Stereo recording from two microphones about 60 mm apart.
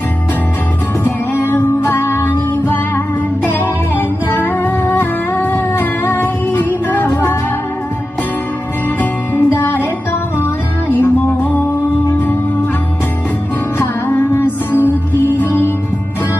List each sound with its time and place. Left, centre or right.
1.0 s music: left
3.9 s music: left
9.3 s music: left
10.9 s music: left
13.7 s music: left